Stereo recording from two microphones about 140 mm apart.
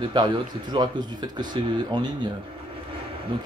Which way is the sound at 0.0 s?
30° right (ahead or behind).